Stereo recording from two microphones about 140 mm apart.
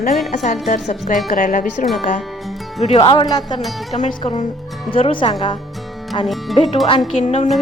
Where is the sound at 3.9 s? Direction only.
40° left (ahead or behind).